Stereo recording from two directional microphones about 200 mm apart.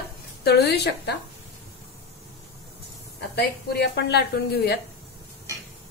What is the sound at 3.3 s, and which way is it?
Speech, 55° left (ahead or behind).